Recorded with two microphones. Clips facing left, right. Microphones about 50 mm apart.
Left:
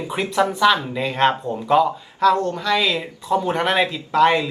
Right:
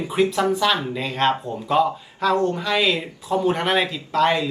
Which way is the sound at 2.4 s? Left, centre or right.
Centre.